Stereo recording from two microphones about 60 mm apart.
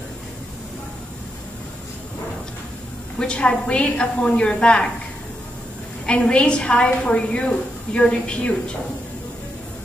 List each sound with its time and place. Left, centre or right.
3.2 s a woman's voice: centre
6.0 s a woman's voice: centre